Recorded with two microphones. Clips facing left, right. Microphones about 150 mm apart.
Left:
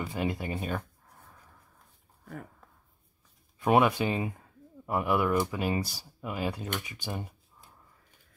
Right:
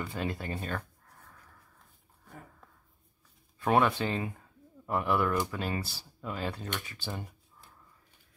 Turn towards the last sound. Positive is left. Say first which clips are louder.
# left 3 dB
turn(degrees=15)  # may be behind; listen again after turning